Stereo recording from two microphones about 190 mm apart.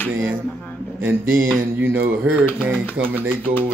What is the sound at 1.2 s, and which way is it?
Mantra, 90° right.